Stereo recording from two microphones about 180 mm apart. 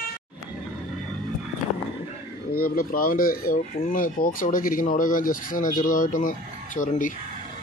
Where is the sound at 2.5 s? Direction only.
55° left (ahead or behind).